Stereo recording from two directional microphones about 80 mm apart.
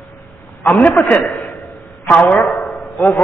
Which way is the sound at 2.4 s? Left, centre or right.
Centre.